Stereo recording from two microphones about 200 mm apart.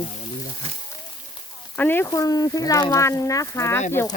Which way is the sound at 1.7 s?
10° left (ahead or behind).